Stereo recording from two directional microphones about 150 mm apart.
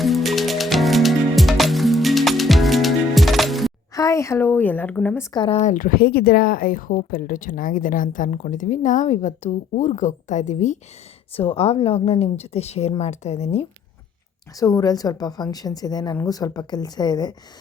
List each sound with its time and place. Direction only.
0.0 s music: centre (ahead or behind)
3.9 s a woman's voice: 20° left (ahead or behind)
5.3 s speech: 35° left (ahead or behind)
5.6 s speech: 65° left (ahead or behind)
11.3 s a woman's voice: 40° left (ahead or behind)
14.5 s a woman's voice: 25° left (ahead or behind)